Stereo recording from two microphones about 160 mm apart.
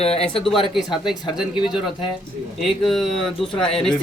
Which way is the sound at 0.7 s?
Centre (ahead or behind).